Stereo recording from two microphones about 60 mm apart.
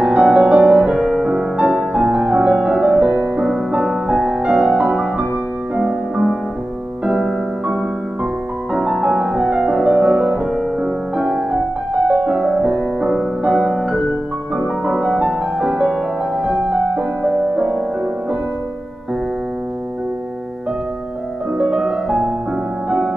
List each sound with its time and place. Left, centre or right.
0.0 s music: centre
1.6 s music: right; by 6.3 s centre
8.8 s music: centre
11.9 s music: right
12.4 s music: centre
15.0 s music: centre
21.5 s music: centre